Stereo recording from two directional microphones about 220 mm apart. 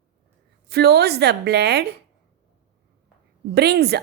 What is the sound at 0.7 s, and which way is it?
A woman's voice, 45° right (ahead or behind).